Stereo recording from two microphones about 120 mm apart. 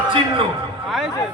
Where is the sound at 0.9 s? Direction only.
Centre (ahead or behind).